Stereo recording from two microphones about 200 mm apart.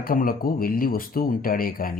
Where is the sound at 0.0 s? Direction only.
45° left (ahead or behind).